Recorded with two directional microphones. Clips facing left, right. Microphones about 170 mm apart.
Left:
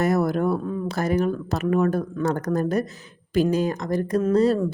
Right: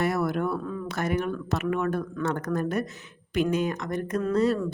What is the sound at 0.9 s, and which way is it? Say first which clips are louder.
Speech: left 5 dB; 35° left (ahead or behind).